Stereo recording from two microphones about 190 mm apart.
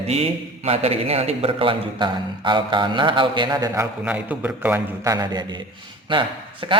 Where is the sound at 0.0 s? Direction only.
35° right (ahead or behind).